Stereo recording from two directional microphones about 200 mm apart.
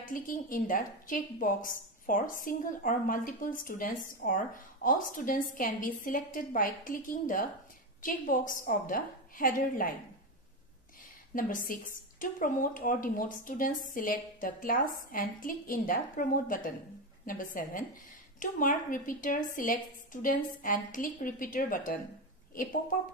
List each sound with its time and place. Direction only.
0.0 s a woman's voice: 40° left (ahead or behind)
11.3 s a woman's voice: 45° left (ahead or behind)